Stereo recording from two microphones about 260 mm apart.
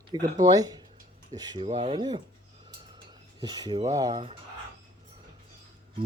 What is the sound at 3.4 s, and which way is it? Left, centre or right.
Speech, centre.